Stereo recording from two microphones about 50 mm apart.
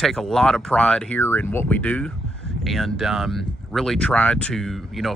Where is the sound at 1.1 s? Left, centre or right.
Left.